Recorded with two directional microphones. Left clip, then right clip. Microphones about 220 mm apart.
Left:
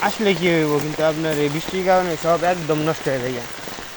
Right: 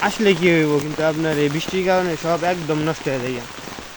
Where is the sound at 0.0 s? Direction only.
30° right (ahead or behind).